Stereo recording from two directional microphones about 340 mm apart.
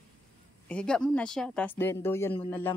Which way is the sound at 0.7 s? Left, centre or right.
Centre.